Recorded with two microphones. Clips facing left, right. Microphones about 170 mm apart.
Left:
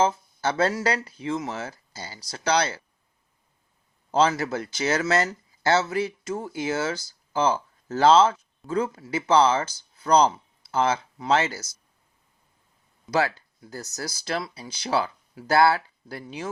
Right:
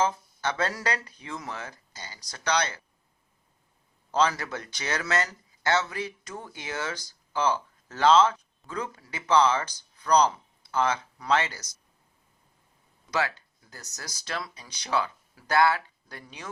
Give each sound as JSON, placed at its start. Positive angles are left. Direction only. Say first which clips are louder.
{"t": 0.0, "sound": "speech", "louder": "left 4 dB", "side_deg": 30}
{"t": 4.1, "sound": "speech", "louder": "left 4 dB", "side_deg": 30}
{"t": 13.1, "sound": "speech", "louder": "left 5 dB", "side_deg": 30}